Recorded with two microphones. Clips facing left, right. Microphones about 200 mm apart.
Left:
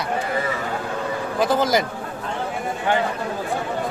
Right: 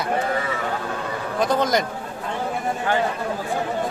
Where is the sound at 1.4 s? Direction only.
5° left (ahead or behind).